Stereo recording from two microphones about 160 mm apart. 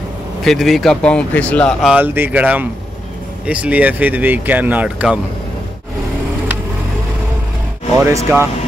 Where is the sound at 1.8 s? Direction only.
10° right (ahead or behind).